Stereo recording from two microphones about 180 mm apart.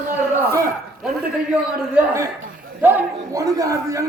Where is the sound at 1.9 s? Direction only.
10° right (ahead or behind).